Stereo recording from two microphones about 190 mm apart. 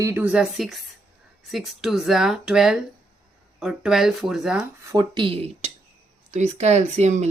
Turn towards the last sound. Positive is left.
turn(degrees=-35)  # may be behind; listen again after turning